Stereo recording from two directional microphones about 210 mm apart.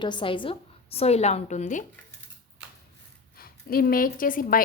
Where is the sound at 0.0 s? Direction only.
20° left (ahead or behind).